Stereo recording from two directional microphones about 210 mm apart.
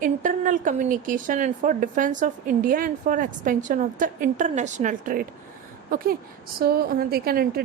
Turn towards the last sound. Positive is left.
turn(degrees=-45)  # may be behind; listen again after turning